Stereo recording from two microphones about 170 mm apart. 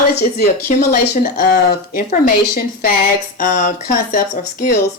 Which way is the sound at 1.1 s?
60° left (ahead or behind).